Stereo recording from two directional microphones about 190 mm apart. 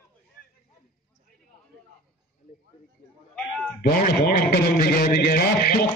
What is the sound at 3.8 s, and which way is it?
A man's voice, 50° left (ahead or behind).